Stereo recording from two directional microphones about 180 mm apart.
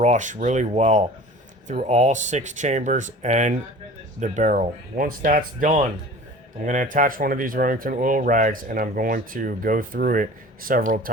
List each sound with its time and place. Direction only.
0.0 s speech: 45° right (ahead or behind)